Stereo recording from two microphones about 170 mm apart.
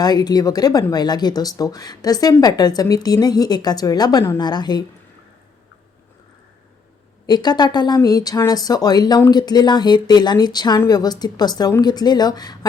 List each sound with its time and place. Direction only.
0.0 s speech: 25° left (ahead or behind)
7.3 s speech: 25° left (ahead or behind)